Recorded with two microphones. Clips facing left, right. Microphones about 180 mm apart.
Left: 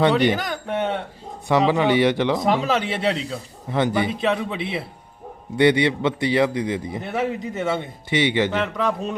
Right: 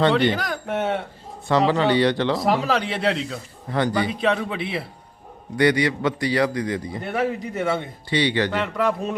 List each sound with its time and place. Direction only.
0.3 s speech: centre (ahead or behind)
1.5 s speech: 15° left (ahead or behind)
2.4 s speech: centre (ahead or behind)
3.7 s a man's voice: 20° left (ahead or behind)
4.2 s speech: centre (ahead or behind)
4.5 s a man's voice: 25° left (ahead or behind)
7.0 s speech: centre (ahead or behind)
8.1 s a man's voice: 20° left (ahead or behind)
8.5 s speech: centre (ahead or behind)